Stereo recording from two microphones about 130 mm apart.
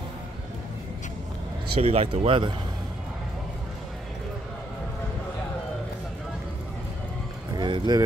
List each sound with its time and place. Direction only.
1.8 s speech: 50° right (ahead or behind)
7.5 s vehicle: 35° right (ahead or behind)